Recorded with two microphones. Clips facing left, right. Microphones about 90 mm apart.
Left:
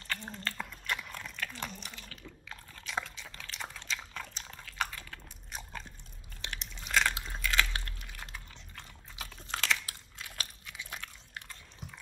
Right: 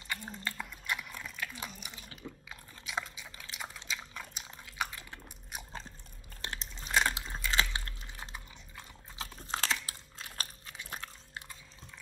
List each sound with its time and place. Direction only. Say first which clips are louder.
0.1 s dog: left 1 dB; 10° right (ahead or behind)
0.6 s a sound: left 1 dB; 5° right (ahead or behind)
3.5 s biting: left 1 dB; 5° right (ahead or behind)
6.4 s biting: right 1 dB; 35° right (ahead or behind)
6.9 s a sound: even; 20° right (ahead or behind)
7.2 s typing: left 1 dB; 25° right (ahead or behind)
9.5 s biting: left 1 dB; 30° right (ahead or behind)